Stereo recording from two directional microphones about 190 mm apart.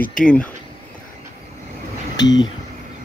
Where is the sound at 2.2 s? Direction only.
20° left (ahead or behind).